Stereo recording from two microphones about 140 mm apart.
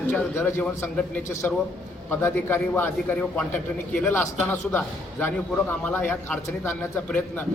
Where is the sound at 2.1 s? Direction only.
15° left (ahead or behind).